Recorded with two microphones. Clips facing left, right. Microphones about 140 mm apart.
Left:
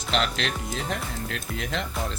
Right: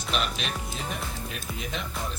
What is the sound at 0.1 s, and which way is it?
Speech, 90° left.